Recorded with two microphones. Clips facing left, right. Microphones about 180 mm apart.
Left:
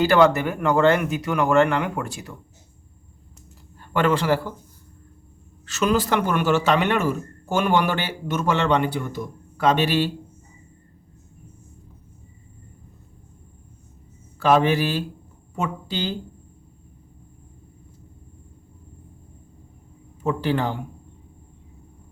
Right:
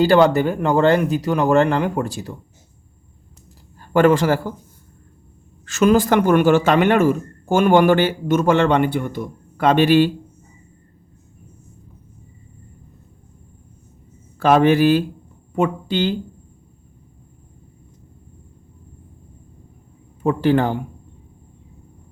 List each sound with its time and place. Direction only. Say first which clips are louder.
0.0 s speech: right 3 dB; 30° right (ahead or behind)
3.8 s a man's voice: right 7 dB; 45° right (ahead or behind)
5.6 s speech: right 6 dB; 50° right (ahead or behind)
14.3 s speech: right 4 dB; 55° right (ahead or behind)
20.2 s speech: right 6 dB; 50° right (ahead or behind)